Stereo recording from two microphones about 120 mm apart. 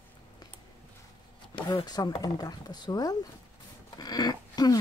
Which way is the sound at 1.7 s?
35° left (ahead or behind).